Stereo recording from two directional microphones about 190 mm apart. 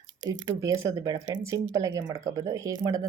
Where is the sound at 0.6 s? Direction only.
15° right (ahead or behind).